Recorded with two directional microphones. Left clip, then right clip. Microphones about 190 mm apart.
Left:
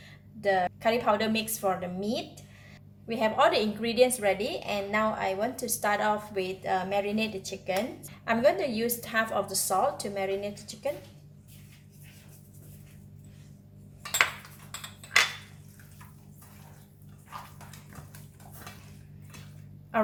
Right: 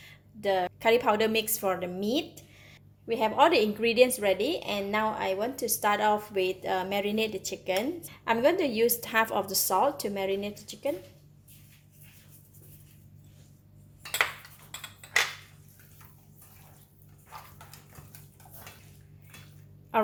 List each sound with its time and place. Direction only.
0.0 s a woman's voice: 50° right (ahead or behind)
3.1 s a woman's voice: 35° right (ahead or behind)